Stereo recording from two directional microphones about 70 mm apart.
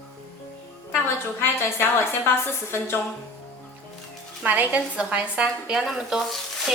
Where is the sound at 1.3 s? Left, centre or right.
Left.